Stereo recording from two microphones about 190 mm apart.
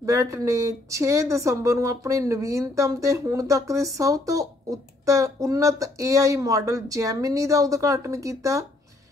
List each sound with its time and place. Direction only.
0.0 s speech: 15° right (ahead or behind)